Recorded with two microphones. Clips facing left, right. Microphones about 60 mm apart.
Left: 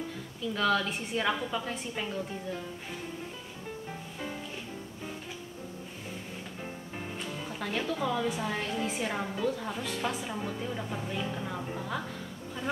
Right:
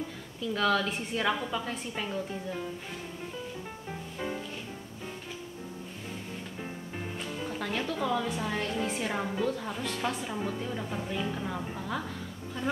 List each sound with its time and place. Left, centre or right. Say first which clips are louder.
0.6 s speech: right 1 dB; centre
6.6 s speech: right 1 dB; centre